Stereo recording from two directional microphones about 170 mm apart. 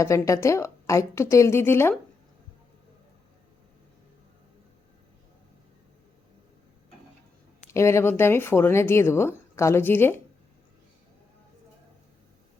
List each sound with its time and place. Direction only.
0.0 s speech: 15° left (ahead or behind)
7.7 s speech: 15° left (ahead or behind)